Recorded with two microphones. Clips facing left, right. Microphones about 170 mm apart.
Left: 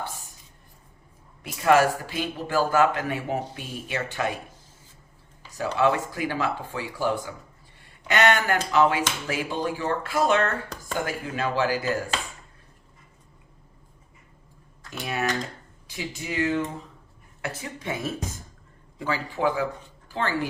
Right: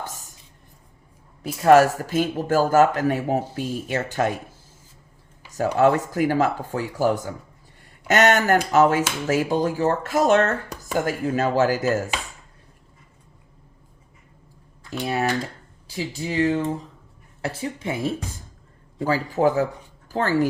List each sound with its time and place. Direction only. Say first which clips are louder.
1.4 s speech: right 5 dB; 40° right (ahead or behind)
5.7 s speech: right 4 dB; 45° right (ahead or behind)
15.0 s speech: right 4 dB; 35° right (ahead or behind)